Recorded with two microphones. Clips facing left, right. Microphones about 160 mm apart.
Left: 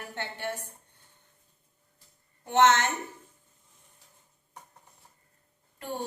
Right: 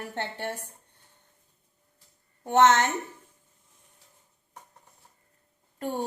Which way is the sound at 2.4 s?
45° right (ahead or behind).